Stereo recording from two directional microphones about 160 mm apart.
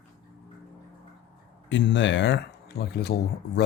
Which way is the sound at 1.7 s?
90° left.